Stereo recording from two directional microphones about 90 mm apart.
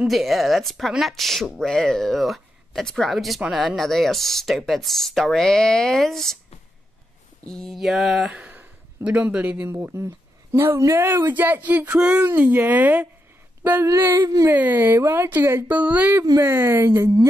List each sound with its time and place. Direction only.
0.0 s speech: centre (ahead or behind)
7.4 s speech: 5° left (ahead or behind)
8.4 s a sound: 15° right (ahead or behind)
9.7 s speech: 25° right (ahead or behind)
14.5 s speech: 20° right (ahead or behind)
16.4 s speech: 25° right (ahead or behind)